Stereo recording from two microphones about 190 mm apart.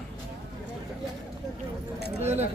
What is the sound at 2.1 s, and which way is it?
Speech, 35° right (ahead or behind).